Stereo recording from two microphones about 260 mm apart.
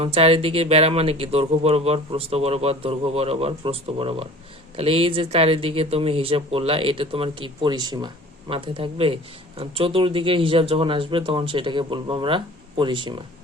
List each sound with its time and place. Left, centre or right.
0.0 s speech: right